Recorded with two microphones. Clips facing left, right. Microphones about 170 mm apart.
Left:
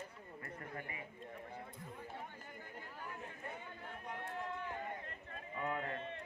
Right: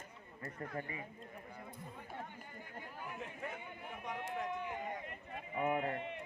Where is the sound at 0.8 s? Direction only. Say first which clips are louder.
Right 5 dB; 30° right (ahead or behind).